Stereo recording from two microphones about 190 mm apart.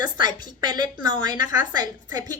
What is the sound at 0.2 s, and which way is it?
A woman's voice, 20° right (ahead or behind).